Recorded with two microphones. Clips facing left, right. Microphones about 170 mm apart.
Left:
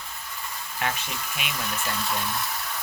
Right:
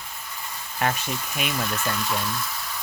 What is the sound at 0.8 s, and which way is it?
Speech, 45° right (ahead or behind).